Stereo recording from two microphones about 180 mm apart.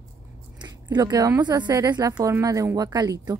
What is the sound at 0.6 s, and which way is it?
Biting, 20° right (ahead or behind).